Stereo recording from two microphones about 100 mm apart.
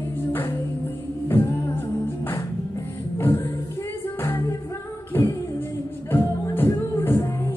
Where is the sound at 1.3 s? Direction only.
20° left (ahead or behind).